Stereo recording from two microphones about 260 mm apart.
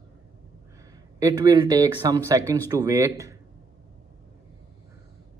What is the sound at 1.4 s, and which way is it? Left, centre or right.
Speech, centre.